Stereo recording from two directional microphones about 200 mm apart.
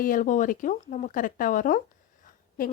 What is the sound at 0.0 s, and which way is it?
Speech, 45° left (ahead or behind).